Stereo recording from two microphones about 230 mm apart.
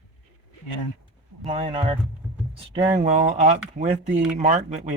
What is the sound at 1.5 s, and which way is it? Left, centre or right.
Speech, right.